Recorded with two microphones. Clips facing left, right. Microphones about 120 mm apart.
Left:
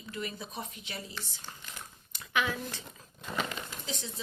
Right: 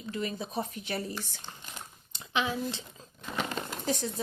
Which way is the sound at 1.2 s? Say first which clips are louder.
Right 3 dB; 20° right (ahead or behind).